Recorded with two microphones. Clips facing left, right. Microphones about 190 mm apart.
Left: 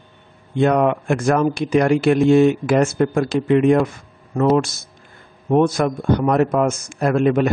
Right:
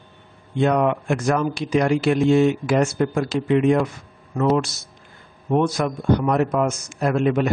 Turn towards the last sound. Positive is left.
turn(degrees=50)  # may be behind; listen again after turning